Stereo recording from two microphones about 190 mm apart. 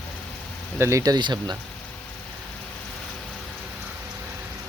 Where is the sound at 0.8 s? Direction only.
15° right (ahead or behind).